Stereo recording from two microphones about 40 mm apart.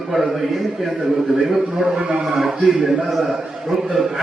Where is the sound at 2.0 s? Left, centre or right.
Centre.